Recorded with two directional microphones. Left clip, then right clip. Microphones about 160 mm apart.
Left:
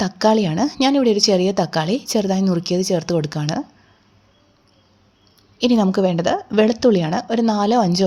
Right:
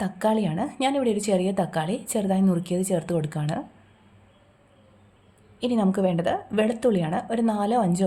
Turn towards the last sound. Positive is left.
turn(degrees=40)  # may be behind; listen again after turning